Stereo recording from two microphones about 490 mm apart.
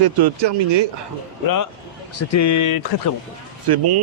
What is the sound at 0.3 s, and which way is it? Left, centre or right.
Speech, right.